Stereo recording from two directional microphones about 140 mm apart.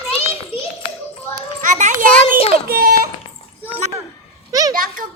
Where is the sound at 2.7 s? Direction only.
90° right.